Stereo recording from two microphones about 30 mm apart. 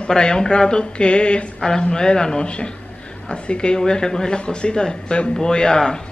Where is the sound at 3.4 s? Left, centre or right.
Left.